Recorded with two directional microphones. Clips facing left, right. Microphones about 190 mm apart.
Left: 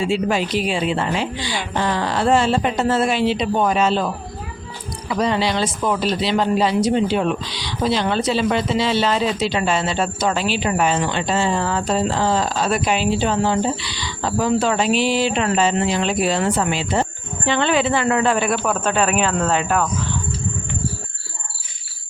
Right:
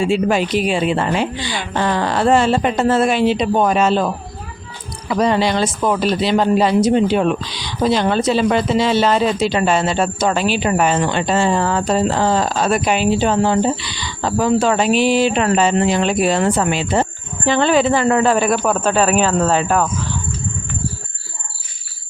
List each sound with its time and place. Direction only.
0.0 s speech: 50° right (ahead or behind)
5.2 s speech: 50° right (ahead or behind)